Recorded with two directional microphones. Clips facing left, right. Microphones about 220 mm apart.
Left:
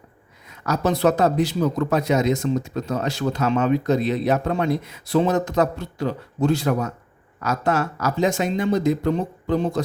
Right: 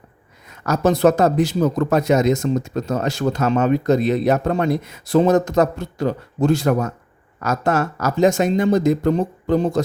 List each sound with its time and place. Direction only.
0.4 s speech: 45° right (ahead or behind)